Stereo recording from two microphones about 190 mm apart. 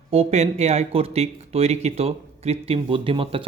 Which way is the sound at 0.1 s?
35° right (ahead or behind).